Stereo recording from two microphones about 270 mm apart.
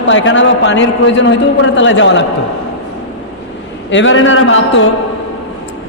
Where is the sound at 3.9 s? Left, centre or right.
Left.